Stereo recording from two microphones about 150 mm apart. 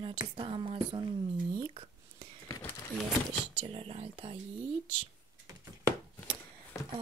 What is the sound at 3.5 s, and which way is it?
Speech, 40° right (ahead or behind).